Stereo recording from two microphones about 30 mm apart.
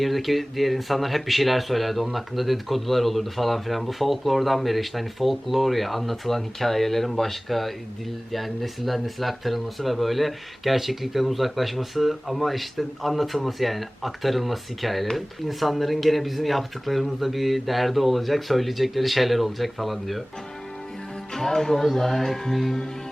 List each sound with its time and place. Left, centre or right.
0.0 s speech: centre
21.3 s speech: centre